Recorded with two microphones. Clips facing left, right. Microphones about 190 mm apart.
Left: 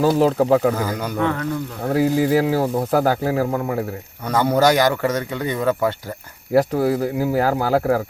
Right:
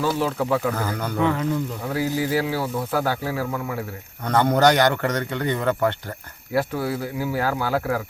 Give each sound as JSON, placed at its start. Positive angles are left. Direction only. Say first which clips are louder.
{"t": 0.0, "sound": "speech", "louder": "left 7 dB", "side_deg": 40}
{"t": 0.8, "sound": "a man's voice", "louder": "left 3 dB", "side_deg": 10}
{"t": 1.8, "sound": "speech", "louder": "left 6 dB", "side_deg": 50}
{"t": 4.3, "sound": "a man's voice", "louder": "left 1 dB", "side_deg": 10}
{"t": 6.5, "sound": "speech", "louder": "left 7 dB", "side_deg": 40}